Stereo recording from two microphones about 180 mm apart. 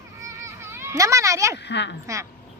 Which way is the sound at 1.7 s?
75° left (ahead or behind).